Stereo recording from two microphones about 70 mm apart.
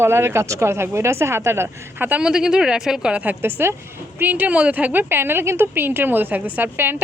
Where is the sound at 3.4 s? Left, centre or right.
Right.